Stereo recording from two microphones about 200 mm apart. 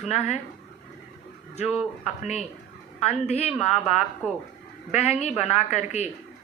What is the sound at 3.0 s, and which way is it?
Speech, 30° left (ahead or behind).